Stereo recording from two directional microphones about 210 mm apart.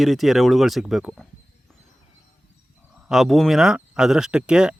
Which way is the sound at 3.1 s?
Centre (ahead or behind).